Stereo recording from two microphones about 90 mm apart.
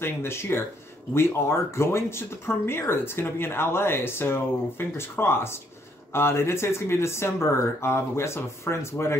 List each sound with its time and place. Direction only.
0.0 s speech: 30° left (ahead or behind)